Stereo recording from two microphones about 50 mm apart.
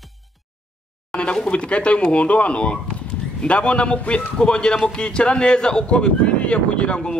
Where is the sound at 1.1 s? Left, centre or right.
Centre.